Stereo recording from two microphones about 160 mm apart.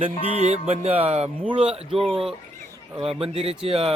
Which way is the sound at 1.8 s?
40° right (ahead or behind).